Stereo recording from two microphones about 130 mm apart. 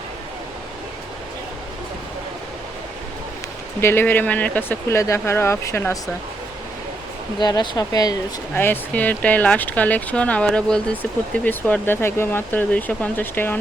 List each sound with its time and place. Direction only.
3.8 s speech: 20° left (ahead or behind)
7.3 s speech: 35° left (ahead or behind)
8.5 s speech: 15° left (ahead or behind)